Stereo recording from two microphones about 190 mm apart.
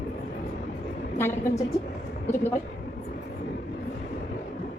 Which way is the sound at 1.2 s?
10° left (ahead or behind).